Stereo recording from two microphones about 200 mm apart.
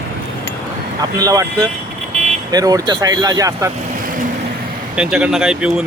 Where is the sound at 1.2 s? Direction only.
20° right (ahead or behind).